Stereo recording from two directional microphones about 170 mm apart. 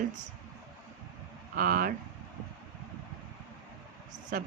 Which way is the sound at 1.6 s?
55° right (ahead or behind).